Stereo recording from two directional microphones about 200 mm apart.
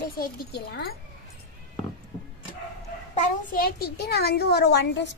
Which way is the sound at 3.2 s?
45° left (ahead or behind).